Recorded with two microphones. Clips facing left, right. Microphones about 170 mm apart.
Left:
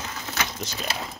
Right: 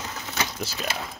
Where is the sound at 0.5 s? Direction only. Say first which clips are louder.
Right 1 dB; 5° right (ahead or behind).